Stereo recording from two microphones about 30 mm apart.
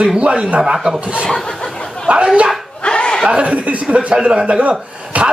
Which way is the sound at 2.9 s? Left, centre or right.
Left.